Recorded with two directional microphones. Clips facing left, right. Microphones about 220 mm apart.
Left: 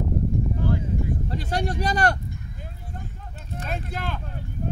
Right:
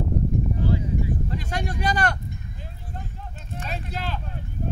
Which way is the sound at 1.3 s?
35° left (ahead or behind).